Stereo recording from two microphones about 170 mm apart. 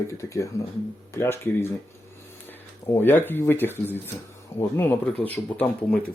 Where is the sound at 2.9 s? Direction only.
10° left (ahead or behind).